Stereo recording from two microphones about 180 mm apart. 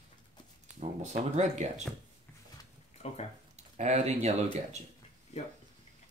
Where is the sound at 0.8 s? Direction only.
40° right (ahead or behind).